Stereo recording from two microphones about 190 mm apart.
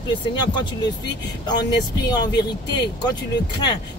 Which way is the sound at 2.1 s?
20° left (ahead or behind).